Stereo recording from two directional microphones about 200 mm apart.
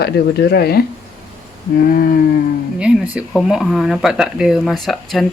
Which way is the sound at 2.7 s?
5° right (ahead or behind).